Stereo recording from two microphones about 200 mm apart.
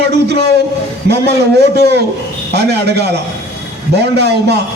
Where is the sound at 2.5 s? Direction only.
55° right (ahead or behind).